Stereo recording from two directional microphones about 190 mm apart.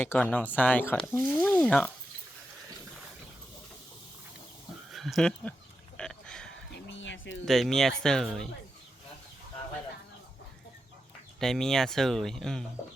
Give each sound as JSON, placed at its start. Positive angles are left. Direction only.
{"t": 0.0, "sound": "speech", "side_deg": 10}
{"t": 4.9, "sound": "speech", "side_deg": 0}
{"t": 6.0, "sound": "a sound", "side_deg": 5}
{"t": 6.9, "sound": "a sound", "side_deg": 75}
{"t": 7.4, "sound": "speech", "side_deg": 0}
{"t": 11.3, "sound": "speech", "side_deg": 0}